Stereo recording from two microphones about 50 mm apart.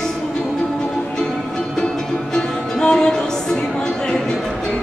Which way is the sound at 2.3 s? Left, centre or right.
Centre.